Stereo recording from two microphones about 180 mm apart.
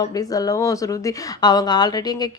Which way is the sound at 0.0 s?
20° left (ahead or behind).